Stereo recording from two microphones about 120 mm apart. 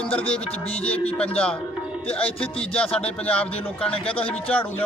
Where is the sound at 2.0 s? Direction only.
50° left (ahead or behind).